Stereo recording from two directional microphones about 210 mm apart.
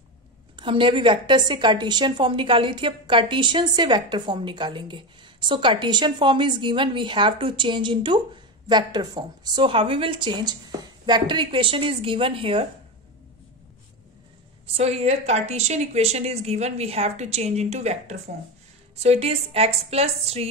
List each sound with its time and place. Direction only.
0.6 s a woman's voice: 25° right (ahead or behind)
14.7 s a woman's voice: 30° right (ahead or behind)